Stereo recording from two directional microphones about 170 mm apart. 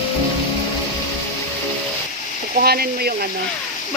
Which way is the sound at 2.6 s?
65° right (ahead or behind).